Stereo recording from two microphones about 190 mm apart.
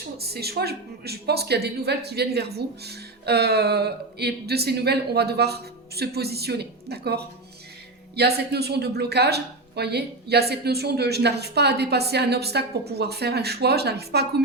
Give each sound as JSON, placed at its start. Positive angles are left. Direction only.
{"t": 0.3, "sound": "speech", "side_deg": -55}